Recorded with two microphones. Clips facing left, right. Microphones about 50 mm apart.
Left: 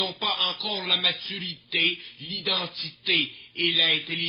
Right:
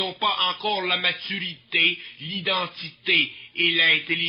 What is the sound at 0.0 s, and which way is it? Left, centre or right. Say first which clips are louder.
Speech: right 4 dB; right.